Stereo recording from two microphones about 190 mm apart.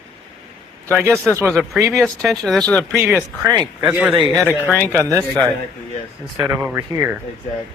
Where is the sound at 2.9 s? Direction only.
10° right (ahead or behind).